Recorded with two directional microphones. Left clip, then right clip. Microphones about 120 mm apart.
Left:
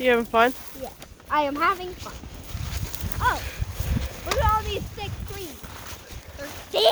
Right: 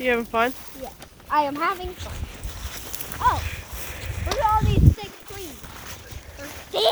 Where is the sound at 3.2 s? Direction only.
25° left (ahead or behind).